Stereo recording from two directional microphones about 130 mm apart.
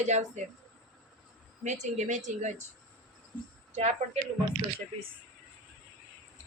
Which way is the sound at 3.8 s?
55° right (ahead or behind).